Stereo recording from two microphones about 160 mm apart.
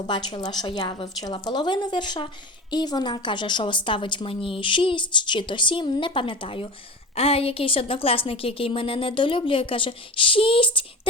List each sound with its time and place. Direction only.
0.1 s a woman's voice: 30° left (ahead or behind)